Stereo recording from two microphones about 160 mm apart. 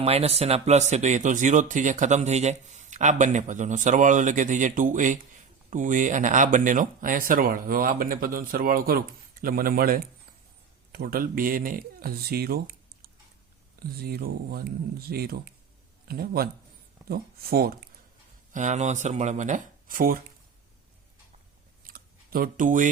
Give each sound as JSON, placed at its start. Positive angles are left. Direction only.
{"t": 0.0, "sound": "speech", "side_deg": -40}
{"t": 18.5, "sound": "speech", "side_deg": -50}
{"t": 21.8, "sound": "a sound", "side_deg": -65}